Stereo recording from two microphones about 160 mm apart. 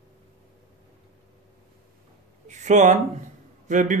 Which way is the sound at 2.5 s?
50° right (ahead or behind).